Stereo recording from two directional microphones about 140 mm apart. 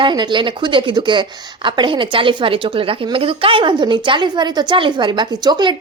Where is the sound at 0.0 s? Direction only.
35° right (ahead or behind).